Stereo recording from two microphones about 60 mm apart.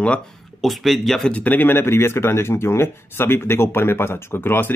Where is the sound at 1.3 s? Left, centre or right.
Left.